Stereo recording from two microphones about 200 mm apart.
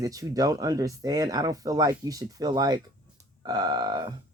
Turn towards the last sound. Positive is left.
turn(degrees=-20)  # may be behind; listen again after turning